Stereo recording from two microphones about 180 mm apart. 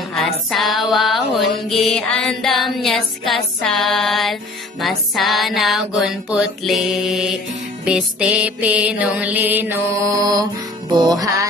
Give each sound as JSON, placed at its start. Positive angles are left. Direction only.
{"t": 0.1, "sound": "mantra", "side_deg": 0}
{"t": 7.8, "sound": "music", "side_deg": -5}